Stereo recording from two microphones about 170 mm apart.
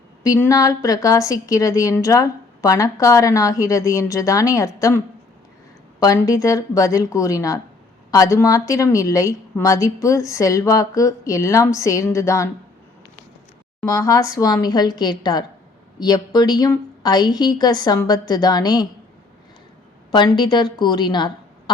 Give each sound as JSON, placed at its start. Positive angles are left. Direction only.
{"t": 0.2, "sound": "a woman's voice", "side_deg": 20}
{"t": 13.8, "sound": "a woman's voice", "side_deg": 20}
{"t": 20.1, "sound": "a woman's voice", "side_deg": 25}